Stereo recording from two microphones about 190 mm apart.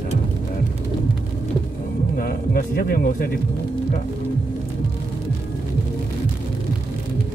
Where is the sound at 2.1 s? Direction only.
50° left (ahead or behind).